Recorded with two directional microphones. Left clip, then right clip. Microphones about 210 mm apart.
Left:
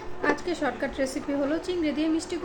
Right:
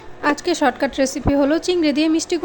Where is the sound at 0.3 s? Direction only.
45° right (ahead or behind).